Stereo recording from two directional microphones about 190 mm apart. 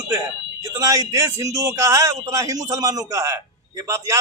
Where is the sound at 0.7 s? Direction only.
20° right (ahead or behind).